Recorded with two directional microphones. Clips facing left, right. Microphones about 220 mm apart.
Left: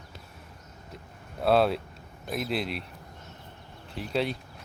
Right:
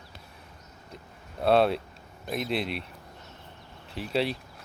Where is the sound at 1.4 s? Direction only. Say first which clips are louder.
Right 1 dB; centre (ahead or behind).